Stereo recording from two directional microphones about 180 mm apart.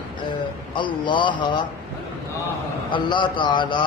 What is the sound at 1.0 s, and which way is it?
Speech, 25° left (ahead or behind).